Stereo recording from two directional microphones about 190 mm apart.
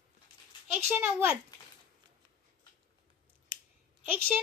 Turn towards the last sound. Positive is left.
turn(degrees=-10)  # may be behind; listen again after turning